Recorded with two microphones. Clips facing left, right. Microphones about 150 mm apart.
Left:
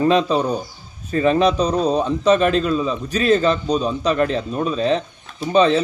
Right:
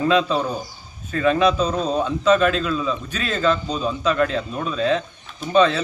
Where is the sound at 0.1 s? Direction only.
35° left (ahead or behind).